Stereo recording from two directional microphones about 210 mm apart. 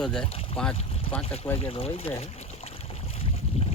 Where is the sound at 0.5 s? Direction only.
30° left (ahead or behind).